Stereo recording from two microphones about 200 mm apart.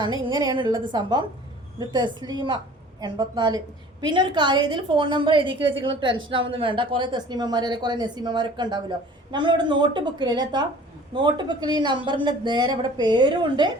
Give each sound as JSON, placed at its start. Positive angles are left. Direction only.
{"t": 0.0, "sound": "speech", "side_deg": -20}